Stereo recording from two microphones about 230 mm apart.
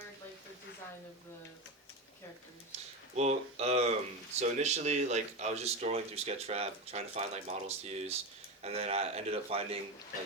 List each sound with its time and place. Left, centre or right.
3.2 s speech: right